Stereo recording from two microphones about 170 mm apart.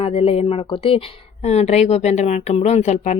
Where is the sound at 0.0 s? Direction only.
35° left (ahead or behind).